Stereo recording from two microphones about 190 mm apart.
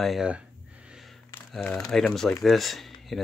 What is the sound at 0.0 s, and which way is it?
Speech, centre (ahead or behind).